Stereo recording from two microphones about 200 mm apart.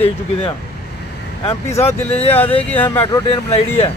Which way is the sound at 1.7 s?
15° left (ahead or behind).